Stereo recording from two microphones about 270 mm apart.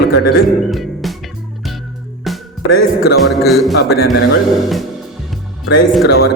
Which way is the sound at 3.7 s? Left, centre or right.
Left.